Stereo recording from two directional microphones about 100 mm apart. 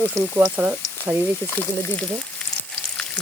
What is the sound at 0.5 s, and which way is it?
Speech, 15° right (ahead or behind).